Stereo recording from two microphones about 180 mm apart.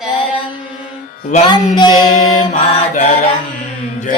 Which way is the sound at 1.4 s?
25° left (ahead or behind).